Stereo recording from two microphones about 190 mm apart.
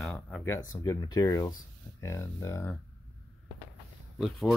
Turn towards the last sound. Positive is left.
turn(degrees=0)  # may be behind; listen again after turning